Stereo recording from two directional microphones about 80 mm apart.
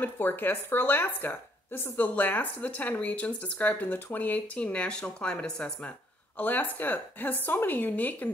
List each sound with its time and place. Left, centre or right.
0.0 s a woman's voice: left